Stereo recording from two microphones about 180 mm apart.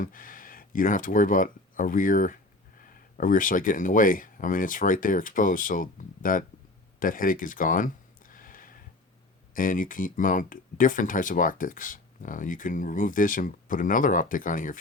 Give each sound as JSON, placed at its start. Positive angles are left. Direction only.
{"t": 0.0, "sound": "speech", "side_deg": 50}
{"t": 7.0, "sound": "a sound", "side_deg": 50}
{"t": 9.6, "sound": "speech", "side_deg": 50}